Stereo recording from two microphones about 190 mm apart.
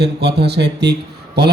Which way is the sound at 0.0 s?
60° right (ahead or behind).